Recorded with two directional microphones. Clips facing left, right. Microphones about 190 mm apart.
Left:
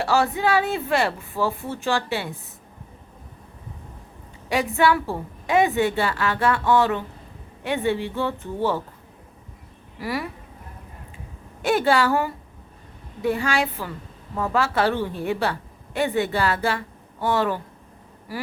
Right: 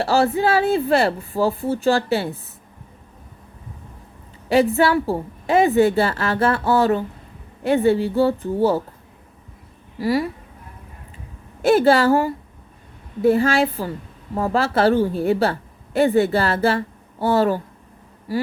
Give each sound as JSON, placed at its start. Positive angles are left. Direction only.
{"t": 0.0, "sound": "a woman's voice", "side_deg": -35}
{"t": 4.4, "sound": "a woman's voice", "side_deg": -35}
{"t": 10.0, "sound": "speech", "side_deg": -30}
{"t": 11.6, "sound": "a woman's voice", "side_deg": -40}